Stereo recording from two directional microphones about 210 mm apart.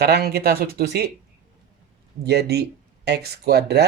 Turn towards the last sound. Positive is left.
turn(degrees=-50)  # may be behind; listen again after turning